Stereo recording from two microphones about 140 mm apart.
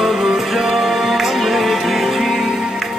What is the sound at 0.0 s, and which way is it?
Music, centre (ahead or behind).